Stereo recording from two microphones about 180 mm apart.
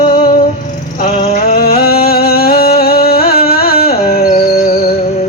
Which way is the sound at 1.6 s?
55° left (ahead or behind).